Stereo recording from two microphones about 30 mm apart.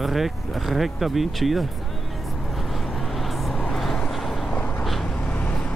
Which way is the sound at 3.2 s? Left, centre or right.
Centre.